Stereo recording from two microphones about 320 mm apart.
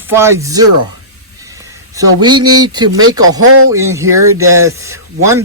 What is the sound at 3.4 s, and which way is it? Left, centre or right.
Speech, right.